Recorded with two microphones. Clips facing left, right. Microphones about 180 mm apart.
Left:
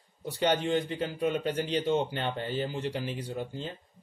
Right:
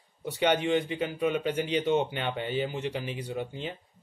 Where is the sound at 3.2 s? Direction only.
60° right (ahead or behind).